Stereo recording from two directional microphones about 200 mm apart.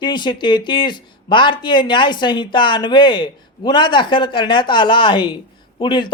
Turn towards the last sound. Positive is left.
turn(degrees=25)  # may be behind; listen again after turning